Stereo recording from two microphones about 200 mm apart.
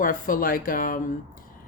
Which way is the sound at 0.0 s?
45° left (ahead or behind).